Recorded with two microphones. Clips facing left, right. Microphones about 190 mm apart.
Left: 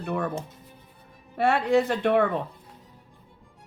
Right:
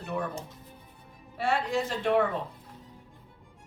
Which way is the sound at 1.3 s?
60° left (ahead or behind).